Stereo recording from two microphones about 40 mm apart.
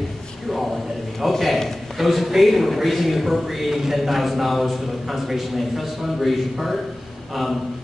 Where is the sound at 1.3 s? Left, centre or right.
Centre.